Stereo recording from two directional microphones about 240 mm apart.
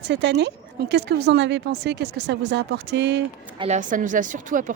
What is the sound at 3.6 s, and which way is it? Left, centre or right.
Speech, right.